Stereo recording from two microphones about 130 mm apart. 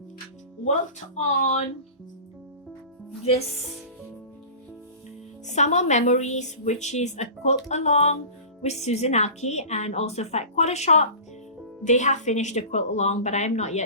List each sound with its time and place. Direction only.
0.6 s a woman's voice: 65° left (ahead or behind)
5.5 s a woman's voice: 65° left (ahead or behind)